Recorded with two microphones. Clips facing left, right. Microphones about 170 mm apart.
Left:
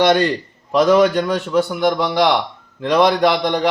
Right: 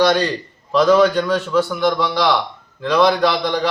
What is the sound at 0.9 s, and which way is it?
A man's voice, 15° left (ahead or behind).